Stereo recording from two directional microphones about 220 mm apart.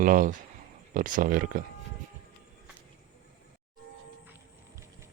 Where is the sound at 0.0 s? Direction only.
40° right (ahead or behind).